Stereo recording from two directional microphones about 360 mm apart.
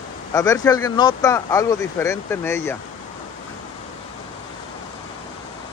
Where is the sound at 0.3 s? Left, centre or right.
Centre.